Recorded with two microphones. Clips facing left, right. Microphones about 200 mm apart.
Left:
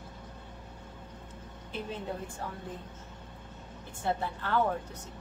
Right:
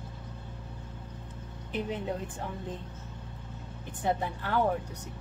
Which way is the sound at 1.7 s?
15° right (ahead or behind).